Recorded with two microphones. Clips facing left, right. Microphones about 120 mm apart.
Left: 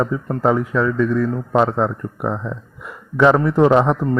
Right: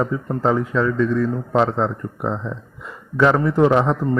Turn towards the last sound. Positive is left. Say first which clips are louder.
# left 2 dB
turn(degrees=15)  # may be behind; listen again after turning